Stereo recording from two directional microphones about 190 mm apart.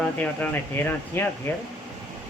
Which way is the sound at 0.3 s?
10° left (ahead or behind).